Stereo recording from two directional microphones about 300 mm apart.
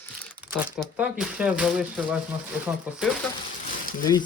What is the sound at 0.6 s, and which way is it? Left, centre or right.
Speech, centre.